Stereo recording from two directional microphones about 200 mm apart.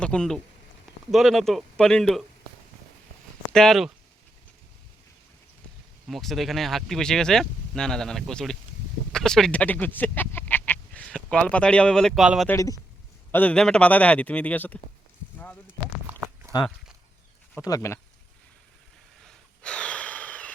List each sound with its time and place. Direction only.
0.0 s speech: 5° left (ahead or behind)
3.5 s speech: centre (ahead or behind)
6.1 s speech: centre (ahead or behind)
12.5 s a man's voice: 15° left (ahead or behind)
16.0 s a sound: 10° right (ahead or behind)
17.6 s a man's voice: 15° left (ahead or behind)
19.2 s wheeze: 5° left (ahead or behind)